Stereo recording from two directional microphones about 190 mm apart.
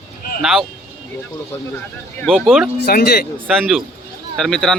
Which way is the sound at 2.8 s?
55° left (ahead or behind).